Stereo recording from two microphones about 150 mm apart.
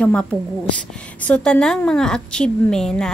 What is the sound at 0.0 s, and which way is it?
A woman's voice, 10° left (ahead or behind).